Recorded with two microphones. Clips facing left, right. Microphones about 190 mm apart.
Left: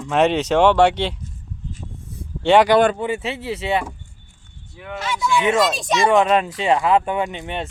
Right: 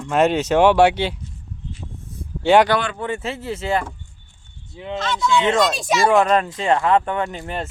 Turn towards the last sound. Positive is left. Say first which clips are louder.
# left 1 dB
turn(degrees=0)  # may be behind; listen again after turning